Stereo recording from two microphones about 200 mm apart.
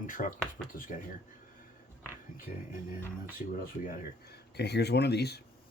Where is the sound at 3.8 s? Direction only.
50° left (ahead or behind).